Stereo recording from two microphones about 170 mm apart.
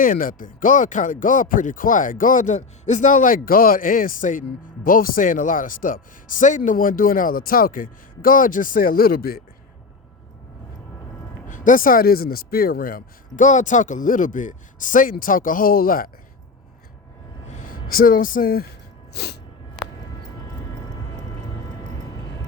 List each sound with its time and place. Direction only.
0.0 s speech: 55° left (ahead or behind)
11.4 s speech: 50° left (ahead or behind)
17.5 s speech: 50° left (ahead or behind)
19.1 s a sound: 75° left (ahead or behind)